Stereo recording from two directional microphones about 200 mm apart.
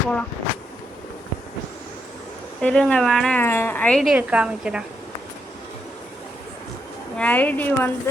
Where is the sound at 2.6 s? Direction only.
5° left (ahead or behind).